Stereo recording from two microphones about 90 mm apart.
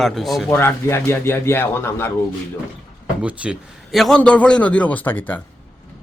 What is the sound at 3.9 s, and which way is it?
Speech, centre (ahead or behind).